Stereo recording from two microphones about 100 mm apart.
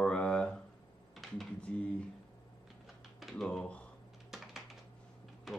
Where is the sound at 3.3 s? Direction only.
5° left (ahead or behind).